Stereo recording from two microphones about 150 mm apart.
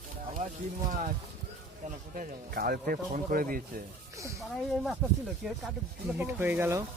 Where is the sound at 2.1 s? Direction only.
65° right (ahead or behind).